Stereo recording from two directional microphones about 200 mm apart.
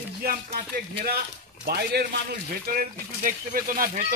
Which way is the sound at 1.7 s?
50° right (ahead or behind).